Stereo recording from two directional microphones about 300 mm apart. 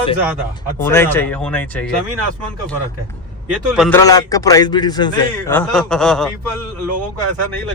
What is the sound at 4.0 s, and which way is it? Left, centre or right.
Speech, centre.